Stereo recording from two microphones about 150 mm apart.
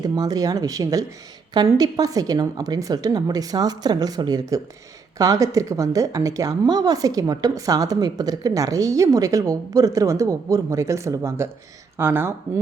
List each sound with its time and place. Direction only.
0.0 s a woman's voice: 25° right (ahead or behind)